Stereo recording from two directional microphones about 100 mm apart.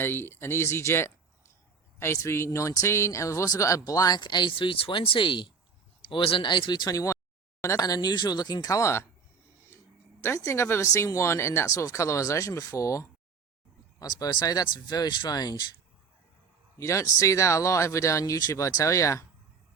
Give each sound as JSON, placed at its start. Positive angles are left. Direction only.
{"t": 0.0, "sound": "speech", "side_deg": 20}
{"t": 6.9, "sound": "speech", "side_deg": 35}
{"t": 9.7, "sound": "a sound", "side_deg": 25}
{"t": 10.2, "sound": "speech", "side_deg": 30}
{"t": 16.7, "sound": "speech", "side_deg": 30}